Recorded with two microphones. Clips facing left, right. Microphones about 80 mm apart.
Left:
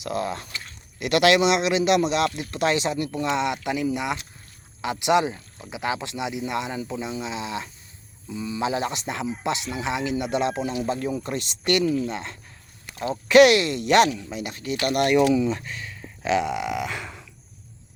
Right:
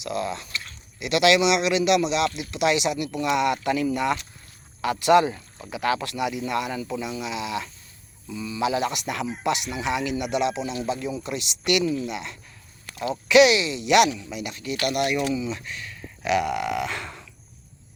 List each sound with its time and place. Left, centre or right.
0.0 s speech: left
10.8 s speech: left
13.3 s speech: left
13.9 s speech: left
15.2 s speech: left
15.4 s speech: left; by 17.2 s centre